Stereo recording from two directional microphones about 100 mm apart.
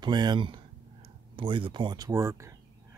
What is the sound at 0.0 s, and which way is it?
Speech, 45° right (ahead or behind).